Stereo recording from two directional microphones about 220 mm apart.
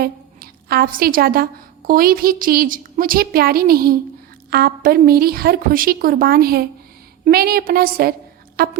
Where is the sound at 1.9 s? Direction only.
40° right (ahead or behind).